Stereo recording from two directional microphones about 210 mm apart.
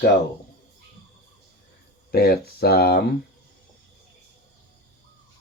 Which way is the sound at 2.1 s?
50° left (ahead or behind).